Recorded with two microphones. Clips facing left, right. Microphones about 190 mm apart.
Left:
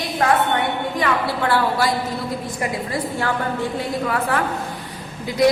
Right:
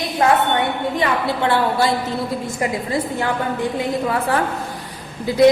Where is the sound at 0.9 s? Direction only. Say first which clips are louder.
Right 1 dB; 25° right (ahead or behind).